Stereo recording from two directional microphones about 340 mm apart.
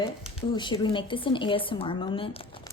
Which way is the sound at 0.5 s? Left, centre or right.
Centre.